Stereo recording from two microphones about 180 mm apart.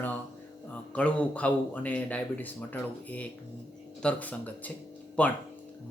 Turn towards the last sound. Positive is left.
turn(degrees=5)  # may be behind; listen again after turning